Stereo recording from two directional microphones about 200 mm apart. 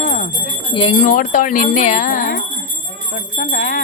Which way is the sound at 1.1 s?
40° left (ahead or behind).